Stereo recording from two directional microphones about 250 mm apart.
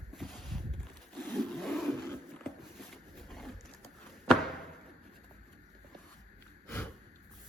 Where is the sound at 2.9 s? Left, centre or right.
Centre.